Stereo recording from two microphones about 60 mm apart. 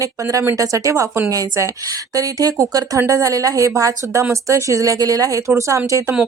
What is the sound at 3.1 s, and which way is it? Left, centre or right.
A woman's voice, right.